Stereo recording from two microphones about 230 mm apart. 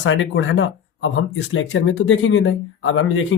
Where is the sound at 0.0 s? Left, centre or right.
Left.